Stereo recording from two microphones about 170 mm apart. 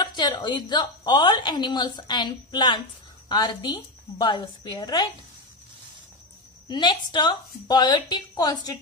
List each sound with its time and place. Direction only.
0.0 s a woman's voice: 25° left (ahead or behind)
6.7 s a woman's voice: 25° left (ahead or behind)